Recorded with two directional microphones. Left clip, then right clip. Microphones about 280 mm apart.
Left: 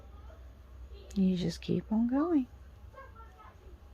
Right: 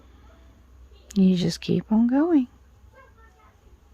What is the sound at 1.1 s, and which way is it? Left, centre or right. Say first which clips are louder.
Speech: right 10 dB; right.